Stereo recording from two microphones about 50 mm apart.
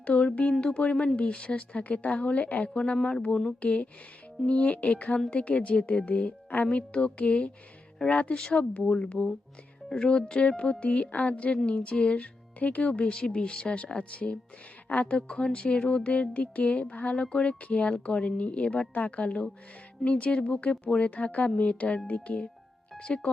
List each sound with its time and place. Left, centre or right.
0.0 s speech: left